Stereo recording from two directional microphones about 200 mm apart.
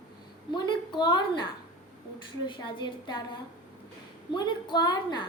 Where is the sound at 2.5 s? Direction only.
25° left (ahead or behind).